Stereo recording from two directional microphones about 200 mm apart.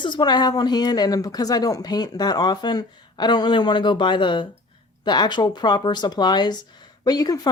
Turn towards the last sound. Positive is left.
turn(degrees=20)  # may be behind; listen again after turning